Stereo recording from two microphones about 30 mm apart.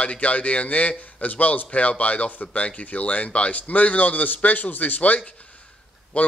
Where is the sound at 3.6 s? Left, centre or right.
Left.